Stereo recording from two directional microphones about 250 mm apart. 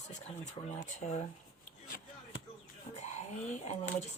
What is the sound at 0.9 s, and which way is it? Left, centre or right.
Speech, left.